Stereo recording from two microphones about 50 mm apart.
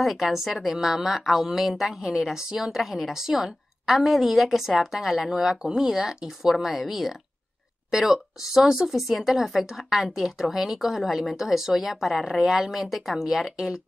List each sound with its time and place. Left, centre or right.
0.0 s a woman's voice: centre